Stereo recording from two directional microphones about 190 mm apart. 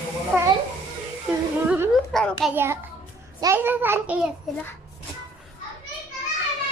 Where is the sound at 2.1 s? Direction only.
5° left (ahead or behind).